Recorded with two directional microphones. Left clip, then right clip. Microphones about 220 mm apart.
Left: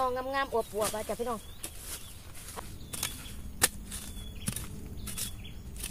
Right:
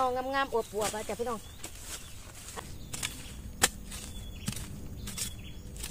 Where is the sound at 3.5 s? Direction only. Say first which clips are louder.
Right 2 dB; 10° left (ahead or behind).